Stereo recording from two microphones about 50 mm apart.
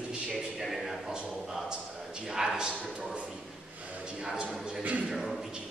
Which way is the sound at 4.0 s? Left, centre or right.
Centre.